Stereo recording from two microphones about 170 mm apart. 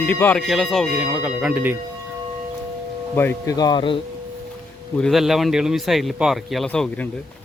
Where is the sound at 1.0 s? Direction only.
10° right (ahead or behind).